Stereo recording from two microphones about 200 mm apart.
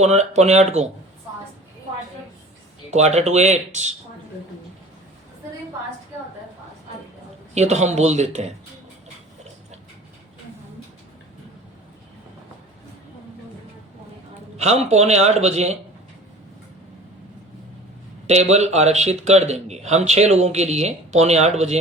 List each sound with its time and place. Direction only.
0.0 s speech: 35° right (ahead or behind)
2.9 s speech: 35° right (ahead or behind)
7.5 s speech: 35° right (ahead or behind)
14.5 s speech: 35° right (ahead or behind)
18.5 s speech: 35° right (ahead or behind)